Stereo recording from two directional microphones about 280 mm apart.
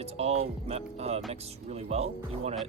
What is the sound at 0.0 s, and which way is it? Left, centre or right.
Speech, right.